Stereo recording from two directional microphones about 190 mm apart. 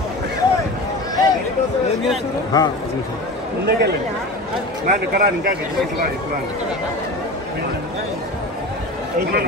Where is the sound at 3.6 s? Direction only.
60° right (ahead or behind).